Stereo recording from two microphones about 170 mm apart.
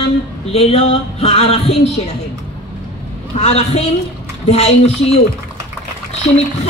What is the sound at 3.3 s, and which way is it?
A woman's voice, 40° left (ahead or behind).